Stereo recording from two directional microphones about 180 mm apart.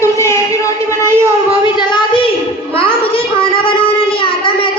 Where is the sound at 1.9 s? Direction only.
30° left (ahead or behind).